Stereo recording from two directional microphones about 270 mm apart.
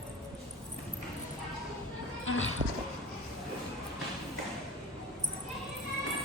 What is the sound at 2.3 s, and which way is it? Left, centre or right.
Music, left.